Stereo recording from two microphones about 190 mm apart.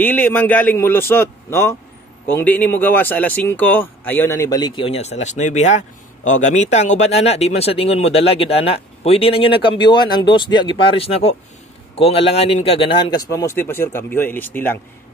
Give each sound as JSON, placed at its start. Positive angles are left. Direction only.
{"t": 0.0, "sound": "a man's voice", "side_deg": 10}